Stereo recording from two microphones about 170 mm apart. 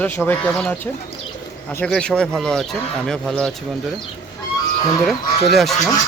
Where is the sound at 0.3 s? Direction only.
5° left (ahead or behind).